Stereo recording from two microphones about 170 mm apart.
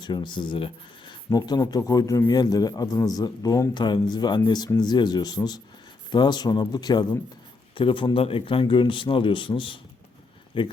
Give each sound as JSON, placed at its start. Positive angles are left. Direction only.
{"t": 0.0, "sound": "speech", "side_deg": 25}